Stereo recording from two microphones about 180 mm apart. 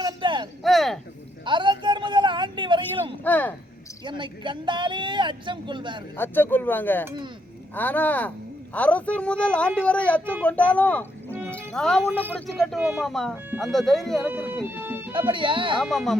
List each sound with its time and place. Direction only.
0.0 s a sound: 25° right (ahead or behind)
0.6 s a sound: centre (ahead or behind)
1.5 s a sound: 25° right (ahead or behind)
3.2 s speech: 10° left (ahead or behind)
4.2 s speech: 25° right (ahead or behind)
6.1 s speech: 10° left (ahead or behind)
14.3 s music: 10° right (ahead or behind)
15.3 s speech: 30° right (ahead or behind)
15.8 s speech: centre (ahead or behind)